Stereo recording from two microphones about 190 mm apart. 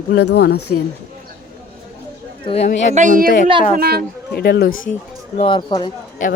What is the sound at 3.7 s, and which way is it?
Speech, 55° right (ahead or behind).